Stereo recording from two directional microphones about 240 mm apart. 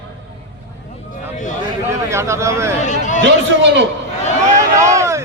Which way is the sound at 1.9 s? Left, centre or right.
Centre.